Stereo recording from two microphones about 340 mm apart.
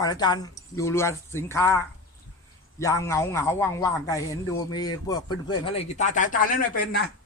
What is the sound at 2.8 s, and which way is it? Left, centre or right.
A man's voice, centre.